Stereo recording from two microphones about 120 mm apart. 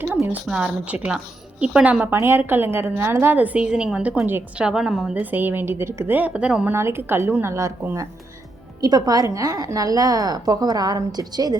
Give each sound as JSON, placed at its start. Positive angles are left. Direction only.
{"t": 0.0, "sound": "a sound", "side_deg": -20}
{"t": 0.4, "sound": "a woman's voice", "side_deg": -5}
{"t": 5.2, "sound": "a woman's voice", "side_deg": -15}
{"t": 6.7, "sound": "a woman's voice", "side_deg": -20}